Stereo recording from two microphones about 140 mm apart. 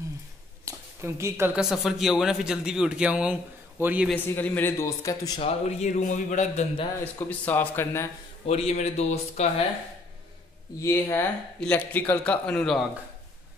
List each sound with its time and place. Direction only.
0.7 s speech: 20° right (ahead or behind)
1.6 s a man's voice: centre (ahead or behind)
4.1 s speech: 15° left (ahead or behind)
5.4 s a man's voice: 50° left (ahead or behind)
7.2 s speech: 10° left (ahead or behind)
8.5 s a man's voice: 50° left (ahead or behind)
10.8 s speech: 15° left (ahead or behind)